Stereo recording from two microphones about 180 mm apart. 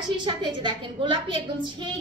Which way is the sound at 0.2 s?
25° right (ahead or behind).